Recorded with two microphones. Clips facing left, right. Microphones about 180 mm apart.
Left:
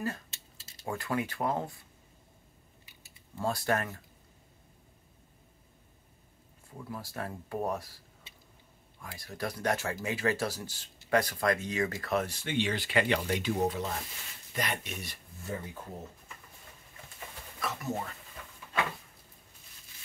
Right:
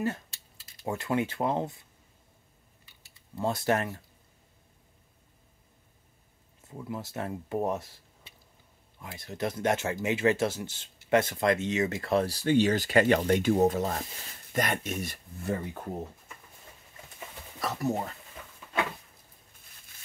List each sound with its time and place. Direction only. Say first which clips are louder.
0.3 s mechanisms: left 2 dB; 25° left (ahead or behind)
0.8 s speech: right 4 dB; 25° right (ahead or behind)
3.3 s speech: right 3 dB; 20° right (ahead or behind)
6.8 s speech: right 4 dB; 20° right (ahead or behind)
9.0 s speech: right 4 dB; 25° right (ahead or behind); by 15.6 s 55° right (ahead or behind)
17.6 s speech: right 5 dB; 35° right (ahead or behind)